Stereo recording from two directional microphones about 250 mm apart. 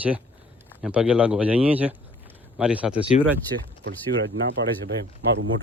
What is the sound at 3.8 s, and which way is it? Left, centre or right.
Speech, right.